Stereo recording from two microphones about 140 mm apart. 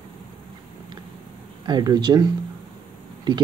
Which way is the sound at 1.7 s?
30° right (ahead or behind).